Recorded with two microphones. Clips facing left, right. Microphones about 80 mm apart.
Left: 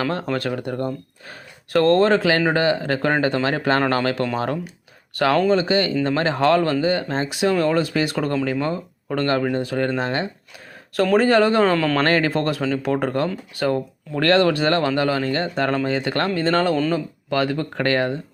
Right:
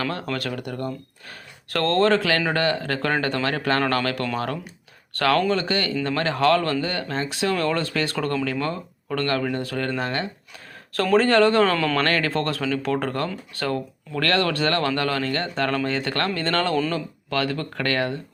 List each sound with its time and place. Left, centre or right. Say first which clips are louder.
0.0 s speech: left 4 dB; left
10.9 s speech: left 2 dB; centre
11.9 s speech: left 3 dB; left